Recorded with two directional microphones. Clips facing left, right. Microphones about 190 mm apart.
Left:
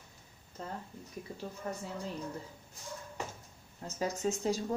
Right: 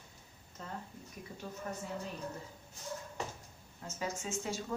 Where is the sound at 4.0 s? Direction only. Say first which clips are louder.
Left 6 dB; 35° left (ahead or behind).